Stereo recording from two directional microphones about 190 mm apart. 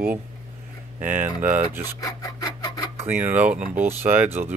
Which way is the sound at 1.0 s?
40° right (ahead or behind).